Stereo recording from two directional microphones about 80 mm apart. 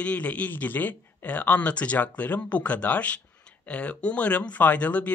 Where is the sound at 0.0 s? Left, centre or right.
Centre.